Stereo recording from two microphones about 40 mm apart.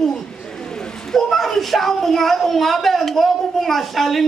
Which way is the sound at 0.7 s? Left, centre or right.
Centre.